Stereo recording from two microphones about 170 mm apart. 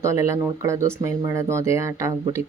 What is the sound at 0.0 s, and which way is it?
Speech, 15° right (ahead or behind).